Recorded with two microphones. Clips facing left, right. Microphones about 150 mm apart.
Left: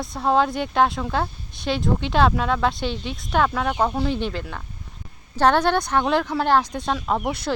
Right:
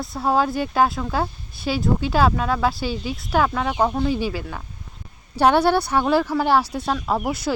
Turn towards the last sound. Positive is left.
turn(degrees=-5)  # may be behind; listen again after turning